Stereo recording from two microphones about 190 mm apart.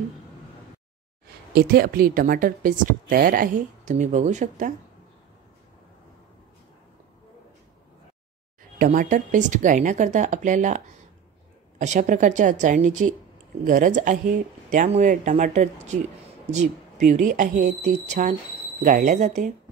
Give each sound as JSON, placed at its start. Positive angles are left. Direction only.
{"t": 1.5, "sound": "speech", "side_deg": -55}
{"t": 8.7, "sound": "speech", "side_deg": -45}
{"t": 11.8, "sound": "speech", "side_deg": -40}